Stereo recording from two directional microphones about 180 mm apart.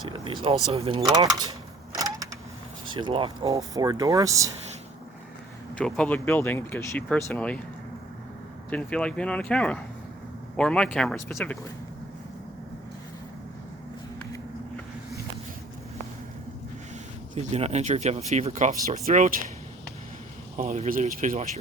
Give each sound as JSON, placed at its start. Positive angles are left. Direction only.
{"t": 0.1, "sound": "speech", "side_deg": -30}
{"t": 2.0, "sound": "power windows", "side_deg": -20}
{"t": 2.8, "sound": "speech", "side_deg": -25}
{"t": 5.7, "sound": "speech", "side_deg": 5}
{"t": 8.7, "sound": "speech", "side_deg": 5}
{"t": 17.3, "sound": "speech", "side_deg": -40}
{"t": 20.6, "sound": "speech", "side_deg": -45}